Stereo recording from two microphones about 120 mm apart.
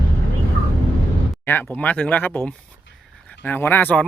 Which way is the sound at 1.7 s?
15° left (ahead or behind).